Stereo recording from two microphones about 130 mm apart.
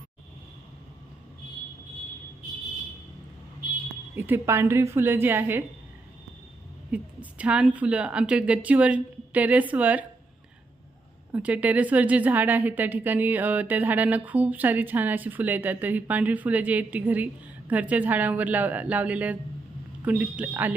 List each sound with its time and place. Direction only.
4.1 s a woman's voice: 15° right (ahead or behind)
6.9 s a woman's voice: 10° right (ahead or behind)
11.3 s a woman's voice: 10° right (ahead or behind)